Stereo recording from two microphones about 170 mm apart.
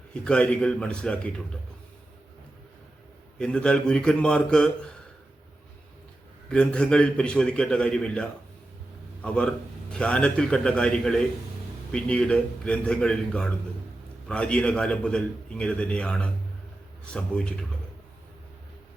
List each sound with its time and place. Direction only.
0.1 s a man's voice: 5° left (ahead or behind)
3.3 s a man's voice: 5° left (ahead or behind)
6.5 s a man's voice: 5° left (ahead or behind)